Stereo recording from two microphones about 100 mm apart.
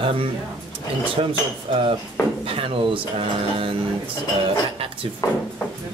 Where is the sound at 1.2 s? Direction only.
85° right.